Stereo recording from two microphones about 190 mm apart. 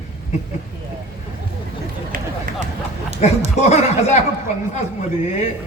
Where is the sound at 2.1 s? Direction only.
50° right (ahead or behind).